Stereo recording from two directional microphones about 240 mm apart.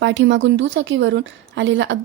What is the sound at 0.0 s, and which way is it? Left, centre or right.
A woman's voice, right.